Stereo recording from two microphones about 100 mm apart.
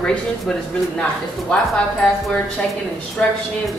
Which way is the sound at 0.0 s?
10° left (ahead or behind).